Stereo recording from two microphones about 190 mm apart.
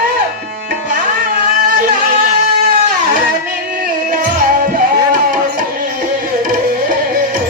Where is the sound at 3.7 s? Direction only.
45° right (ahead or behind).